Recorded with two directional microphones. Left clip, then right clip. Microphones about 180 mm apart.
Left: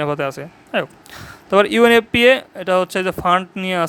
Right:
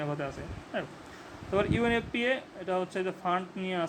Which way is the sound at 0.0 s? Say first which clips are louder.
Left 14 dB; 45° left (ahead or behind).